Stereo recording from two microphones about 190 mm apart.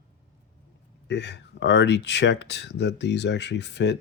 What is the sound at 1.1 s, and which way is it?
Speech, 65° left (ahead or behind).